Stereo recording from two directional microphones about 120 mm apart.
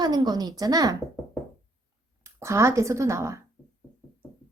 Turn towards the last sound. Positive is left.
turn(degrees=-25)  # may be behind; listen again after turning